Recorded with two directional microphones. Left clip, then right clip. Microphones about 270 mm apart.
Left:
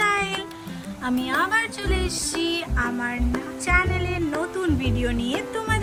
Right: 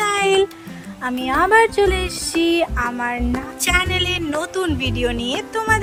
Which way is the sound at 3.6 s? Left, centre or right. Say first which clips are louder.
Right 4 dB; right.